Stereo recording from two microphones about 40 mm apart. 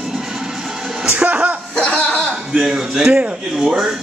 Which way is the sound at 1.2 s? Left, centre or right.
Right.